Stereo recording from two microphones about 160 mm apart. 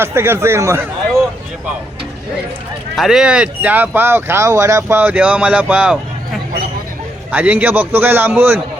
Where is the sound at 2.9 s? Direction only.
Centre (ahead or behind).